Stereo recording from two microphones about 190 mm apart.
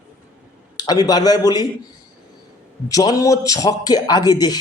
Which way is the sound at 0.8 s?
20° left (ahead or behind).